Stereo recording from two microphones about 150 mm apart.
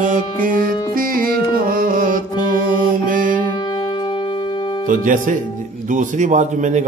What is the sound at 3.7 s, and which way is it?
Music, 30° left (ahead or behind).